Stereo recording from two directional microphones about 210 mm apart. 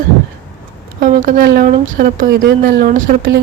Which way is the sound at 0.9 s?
40° right (ahead or behind).